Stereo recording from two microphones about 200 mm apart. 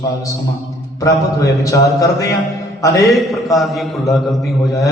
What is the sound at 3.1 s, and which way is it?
A man's voice, centre (ahead or behind).